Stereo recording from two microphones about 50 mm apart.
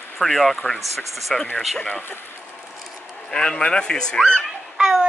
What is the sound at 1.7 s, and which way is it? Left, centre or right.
Speech, left.